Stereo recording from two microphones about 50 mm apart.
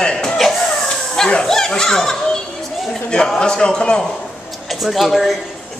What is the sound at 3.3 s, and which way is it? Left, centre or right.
Speech, centre.